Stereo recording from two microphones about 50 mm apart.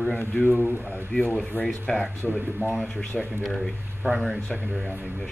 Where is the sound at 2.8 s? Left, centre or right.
Left.